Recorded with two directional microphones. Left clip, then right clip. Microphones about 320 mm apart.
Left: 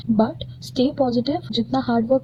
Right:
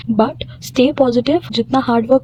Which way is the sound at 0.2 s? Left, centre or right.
Right.